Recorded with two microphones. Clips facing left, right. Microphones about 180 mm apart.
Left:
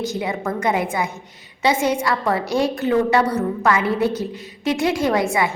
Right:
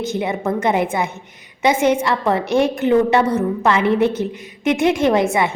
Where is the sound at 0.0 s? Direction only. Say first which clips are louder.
Right 3 dB; 25° right (ahead or behind).